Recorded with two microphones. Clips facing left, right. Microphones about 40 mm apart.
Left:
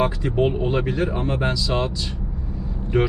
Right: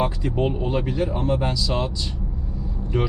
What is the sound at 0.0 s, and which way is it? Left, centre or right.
Speech, centre.